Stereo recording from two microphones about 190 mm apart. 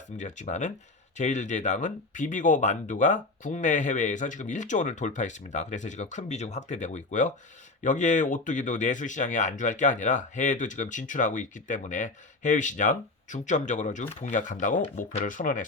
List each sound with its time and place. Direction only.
0.2 s speech: 40° left (ahead or behind)